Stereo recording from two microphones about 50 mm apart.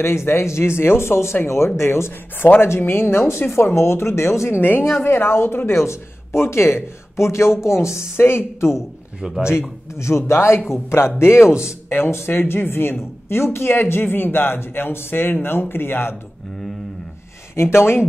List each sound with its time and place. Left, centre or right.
0.0 s speech: left
4.6 s a woman's voice: left
5.7 s speech: left
8.2 s speech: left
9.9 s speech: left
17.6 s speech: left